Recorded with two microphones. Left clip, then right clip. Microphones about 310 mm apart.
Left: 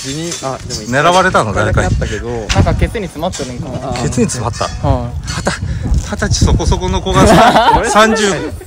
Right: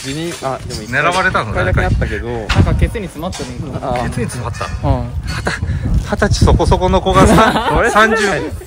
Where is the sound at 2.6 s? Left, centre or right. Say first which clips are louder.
Left 3 dB; left.